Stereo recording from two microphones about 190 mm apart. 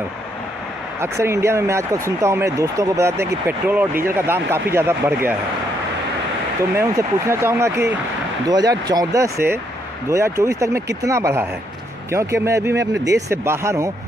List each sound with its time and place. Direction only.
1.0 s speech: 15° right (ahead or behind)
6.8 s speech: 15° right (ahead or behind)